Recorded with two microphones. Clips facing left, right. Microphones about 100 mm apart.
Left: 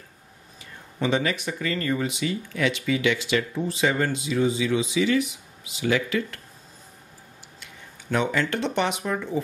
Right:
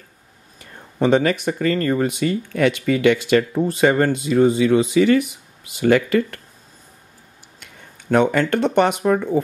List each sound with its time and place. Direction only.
0.6 s speech: 50° right (ahead or behind)
7.6 s speech: 50° right (ahead or behind)